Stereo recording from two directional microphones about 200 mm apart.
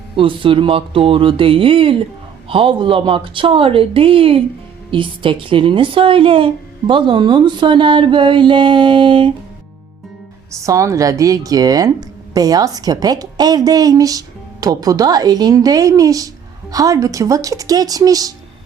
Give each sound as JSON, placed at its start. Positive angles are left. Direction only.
{"t": 0.2, "sound": "a woman's voice", "side_deg": -25}
{"t": 10.6, "sound": "speech", "side_deg": -15}